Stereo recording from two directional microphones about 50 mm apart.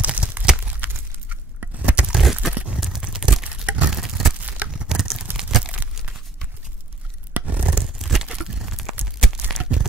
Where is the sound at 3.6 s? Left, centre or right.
Right.